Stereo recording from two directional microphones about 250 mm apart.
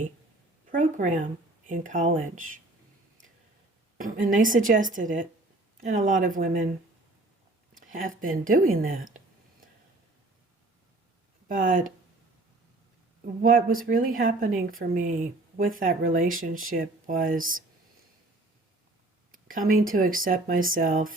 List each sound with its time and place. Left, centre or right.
0.7 s speech: right
3.9 s speech: right
7.7 s speech: right
11.4 s speech: right
13.4 s speech: right
19.3 s speech: right